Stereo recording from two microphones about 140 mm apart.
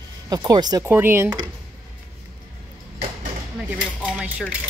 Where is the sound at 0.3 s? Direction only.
30° right (ahead or behind).